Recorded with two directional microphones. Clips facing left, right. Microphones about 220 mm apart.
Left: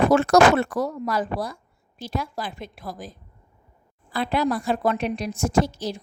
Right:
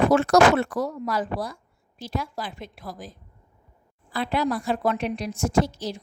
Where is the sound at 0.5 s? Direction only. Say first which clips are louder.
Left 1 dB; 50° left (ahead or behind).